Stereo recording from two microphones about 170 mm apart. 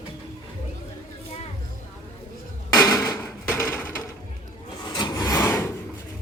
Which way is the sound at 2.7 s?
20° left (ahead or behind).